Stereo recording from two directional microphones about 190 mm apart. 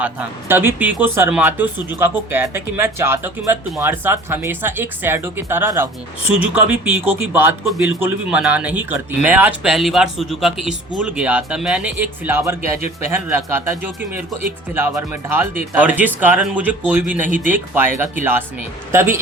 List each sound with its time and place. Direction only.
0.0 s speech: 10° right (ahead or behind)
17.2 s speech: 45° right (ahead or behind)
17.5 s speech: 10° right (ahead or behind)